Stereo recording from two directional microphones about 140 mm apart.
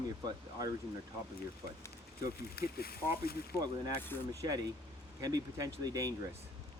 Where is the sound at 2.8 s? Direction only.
90° left.